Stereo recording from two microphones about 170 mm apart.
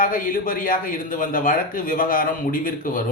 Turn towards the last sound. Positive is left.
turn(degrees=55)  # may be behind; listen again after turning